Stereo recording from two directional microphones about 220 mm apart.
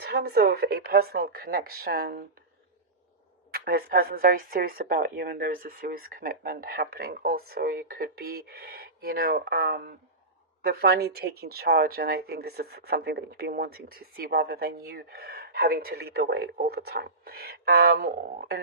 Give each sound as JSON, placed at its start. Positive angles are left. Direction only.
{"t": 0.0, "sound": "speech", "side_deg": -45}
{"t": 3.5, "sound": "speech", "side_deg": -45}